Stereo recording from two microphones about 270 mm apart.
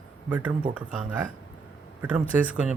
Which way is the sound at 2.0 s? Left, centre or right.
Centre.